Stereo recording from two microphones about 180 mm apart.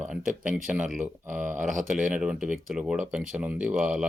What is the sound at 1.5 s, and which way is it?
Speech, 45° right (ahead or behind).